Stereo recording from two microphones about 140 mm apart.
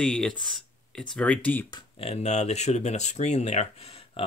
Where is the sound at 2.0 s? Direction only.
50° left (ahead or behind).